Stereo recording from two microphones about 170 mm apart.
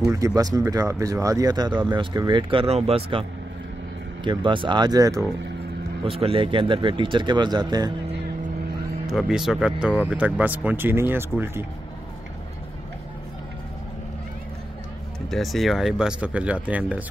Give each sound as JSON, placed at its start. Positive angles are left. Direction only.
{"t": 0.1, "sound": "speech", "side_deg": -20}
{"t": 6.0, "sound": "speech", "side_deg": -35}
{"t": 9.1, "sound": "speech", "side_deg": -5}
{"t": 15.2, "sound": "speech", "side_deg": 0}